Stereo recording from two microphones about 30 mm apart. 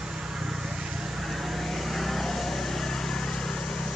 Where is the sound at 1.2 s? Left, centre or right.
Centre; by 3.9 s left.